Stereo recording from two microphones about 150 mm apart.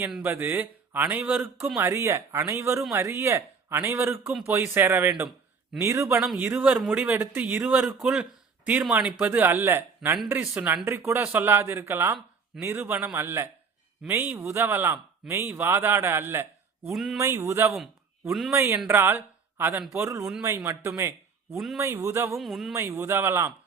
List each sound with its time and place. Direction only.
0.2 s a man's voice: 15° right (ahead or behind)
1.8 s a man's voice: 20° right (ahead or behind)
16.9 s speech: centre (ahead or behind)
17.2 s a man's voice: 15° right (ahead or behind)
18.3 s speech: centre (ahead or behind)
18.5 s a man's voice: 15° right (ahead or behind)
22.4 s speech: centre (ahead or behind)
22.7 s a man's voice: 20° right (ahead or behind)